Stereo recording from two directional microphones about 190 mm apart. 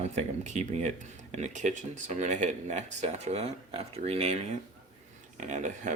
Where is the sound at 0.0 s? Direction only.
40° right (ahead or behind).